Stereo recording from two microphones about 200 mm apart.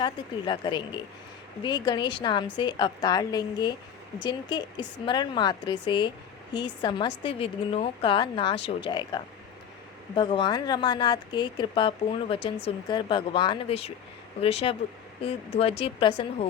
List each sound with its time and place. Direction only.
0.0 s speech: 25° left (ahead or behind)